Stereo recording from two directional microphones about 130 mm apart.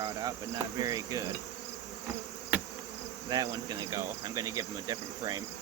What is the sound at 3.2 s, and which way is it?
Cricket, 30° right (ahead or behind).